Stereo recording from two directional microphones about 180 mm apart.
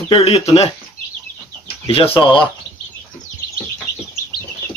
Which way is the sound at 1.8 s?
35° left (ahead or behind).